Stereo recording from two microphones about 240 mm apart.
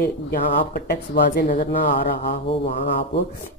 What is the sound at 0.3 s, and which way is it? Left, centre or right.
Speech, left.